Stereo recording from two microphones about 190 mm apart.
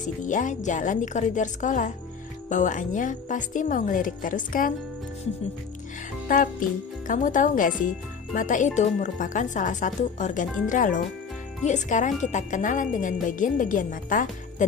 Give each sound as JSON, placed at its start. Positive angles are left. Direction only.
{"t": 0.0, "sound": "speech", "side_deg": 40}
{"t": 6.2, "sound": "music", "side_deg": 45}
{"t": 7.1, "sound": "speech", "side_deg": 45}